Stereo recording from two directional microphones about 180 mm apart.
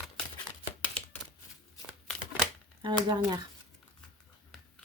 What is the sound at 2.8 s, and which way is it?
Speech, 25° right (ahead or behind).